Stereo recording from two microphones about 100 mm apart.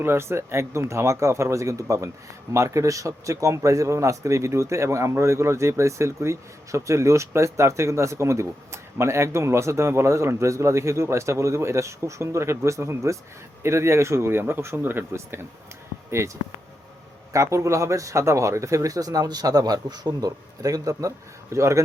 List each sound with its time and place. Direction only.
0.0 s speech: 25° right (ahead or behind)